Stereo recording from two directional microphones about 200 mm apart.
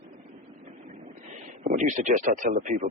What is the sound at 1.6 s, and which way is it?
Speech, 40° right (ahead or behind).